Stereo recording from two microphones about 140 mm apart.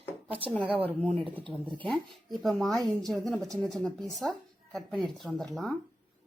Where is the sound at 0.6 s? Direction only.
40° right (ahead or behind).